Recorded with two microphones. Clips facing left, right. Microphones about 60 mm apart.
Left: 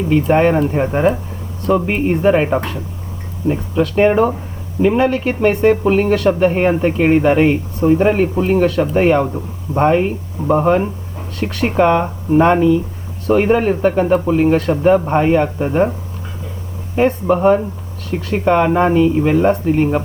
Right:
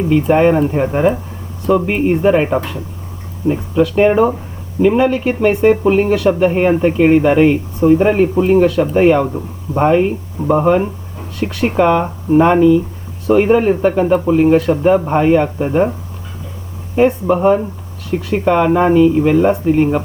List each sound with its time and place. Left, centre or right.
0.3 s speech: centre
3.4 s speech: right
3.8 s speech: centre
7.8 s speech: centre
17.1 s speech: centre